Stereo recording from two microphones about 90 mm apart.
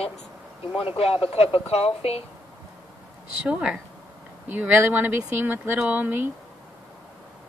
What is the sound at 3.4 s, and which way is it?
Speech, 10° right (ahead or behind).